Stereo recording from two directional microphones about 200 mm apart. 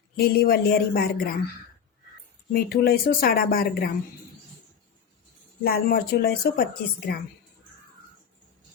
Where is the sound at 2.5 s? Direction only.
50° left (ahead or behind).